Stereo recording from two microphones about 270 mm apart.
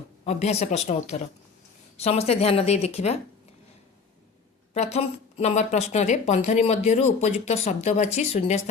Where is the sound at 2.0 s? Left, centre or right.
Left.